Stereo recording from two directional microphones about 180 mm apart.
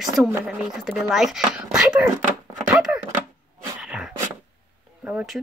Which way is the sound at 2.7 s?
5° right (ahead or behind).